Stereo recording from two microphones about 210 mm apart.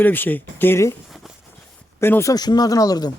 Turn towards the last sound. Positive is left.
turn(degrees=20)  # may be behind; listen again after turning